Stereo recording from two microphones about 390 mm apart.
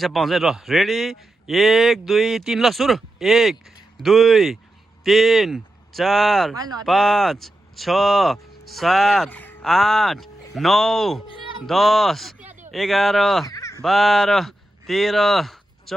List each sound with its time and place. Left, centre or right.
0.0 s speech: centre